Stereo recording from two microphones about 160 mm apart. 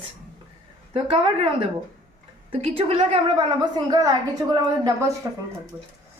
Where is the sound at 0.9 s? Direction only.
35° right (ahead or behind).